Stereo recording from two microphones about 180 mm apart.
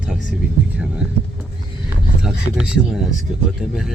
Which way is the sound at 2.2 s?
5° right (ahead or behind).